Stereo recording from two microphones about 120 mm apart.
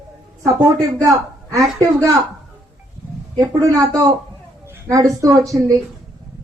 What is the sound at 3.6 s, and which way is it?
Speech, 30° right (ahead or behind).